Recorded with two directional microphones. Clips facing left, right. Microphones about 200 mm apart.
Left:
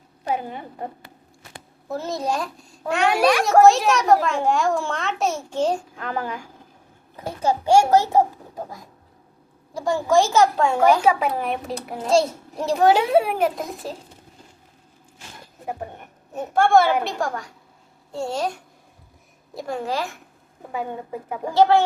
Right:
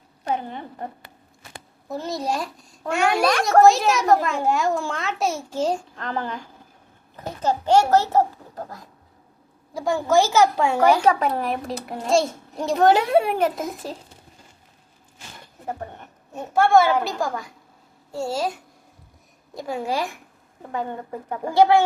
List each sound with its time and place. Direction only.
0.3 s speech: 10° left (ahead or behind)
1.9 s a child's voice: centre (ahead or behind)
9.7 s a child's voice: centre (ahead or behind)
11.0 s a child's voice: 5° left (ahead or behind)
16.3 s a child's voice: centre (ahead or behind)
19.5 s a woman's voice: 5° right (ahead or behind)
20.7 s speech: 10° left (ahead or behind)
21.5 s a woman's voice: 10° right (ahead or behind)